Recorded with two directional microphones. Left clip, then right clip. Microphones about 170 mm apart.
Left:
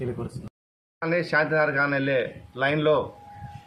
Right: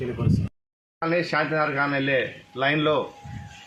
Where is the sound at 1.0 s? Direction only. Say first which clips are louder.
Even; 25° left (ahead or behind).